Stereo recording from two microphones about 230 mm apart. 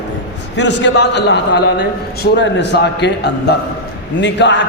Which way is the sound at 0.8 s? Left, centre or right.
Left.